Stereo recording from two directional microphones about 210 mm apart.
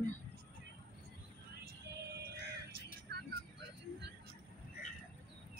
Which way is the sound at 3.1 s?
50° right (ahead or behind).